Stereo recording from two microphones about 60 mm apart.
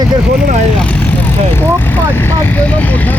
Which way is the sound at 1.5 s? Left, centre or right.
Left.